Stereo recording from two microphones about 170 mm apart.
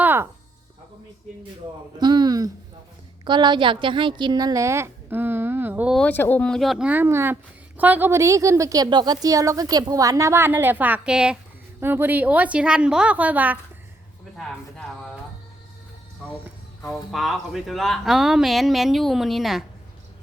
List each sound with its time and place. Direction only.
0.0 s music: 10° right (ahead or behind)
2.0 s a woman's voice: 25° right (ahead or behind); by 6.0 s 10° right (ahead or behind)
6.0 s a woman's voice: 10° left (ahead or behind); by 13.6 s 10° right (ahead or behind)
17.1 s speech: centre (ahead or behind)